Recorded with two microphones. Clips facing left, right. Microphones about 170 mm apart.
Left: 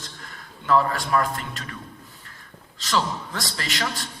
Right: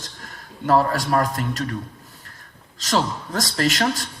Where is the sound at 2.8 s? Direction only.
45° right (ahead or behind).